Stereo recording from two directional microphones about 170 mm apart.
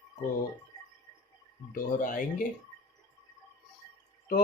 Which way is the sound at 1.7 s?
50° left (ahead or behind).